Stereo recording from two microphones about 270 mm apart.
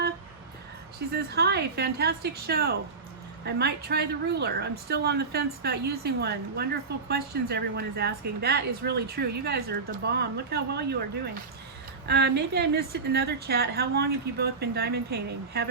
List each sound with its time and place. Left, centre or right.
0.9 s a woman's voice: right
12.0 s a woman's voice: right